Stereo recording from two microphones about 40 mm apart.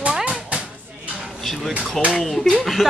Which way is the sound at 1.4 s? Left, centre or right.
Centre.